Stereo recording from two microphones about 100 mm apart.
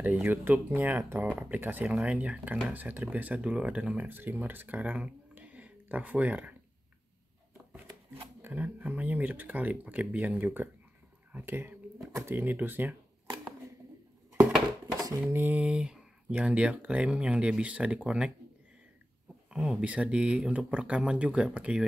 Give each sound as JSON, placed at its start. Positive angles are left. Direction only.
{"t": 0.0, "sound": "speech", "side_deg": -15}
{"t": 8.4, "sound": "speech", "side_deg": -20}
{"t": 15.2, "sound": "speech", "side_deg": -20}
{"t": 19.5, "sound": "speech", "side_deg": -5}